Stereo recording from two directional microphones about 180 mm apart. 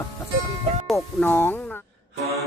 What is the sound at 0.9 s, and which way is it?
Speech, 15° left (ahead or behind).